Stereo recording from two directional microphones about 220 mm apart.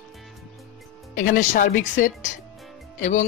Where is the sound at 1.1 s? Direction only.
35° left (ahead or behind).